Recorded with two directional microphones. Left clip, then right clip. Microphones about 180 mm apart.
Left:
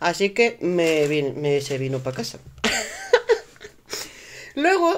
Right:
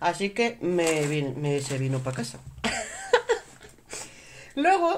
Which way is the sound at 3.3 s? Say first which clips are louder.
Left 6 dB; 35° left (ahead or behind).